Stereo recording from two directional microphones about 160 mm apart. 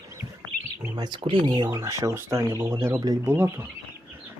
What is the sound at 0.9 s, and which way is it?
Speech, 30° right (ahead or behind).